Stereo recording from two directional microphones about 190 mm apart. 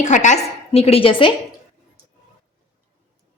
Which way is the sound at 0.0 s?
40° left (ahead or behind).